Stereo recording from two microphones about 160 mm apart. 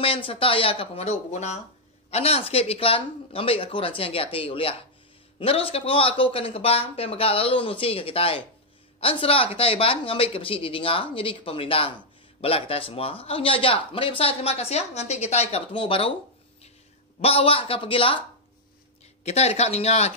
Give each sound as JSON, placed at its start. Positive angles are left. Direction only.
{"t": 0.0, "sound": "speech", "side_deg": 35}
{"t": 17.2, "sound": "speech", "side_deg": 35}
{"t": 19.2, "sound": "speech", "side_deg": 45}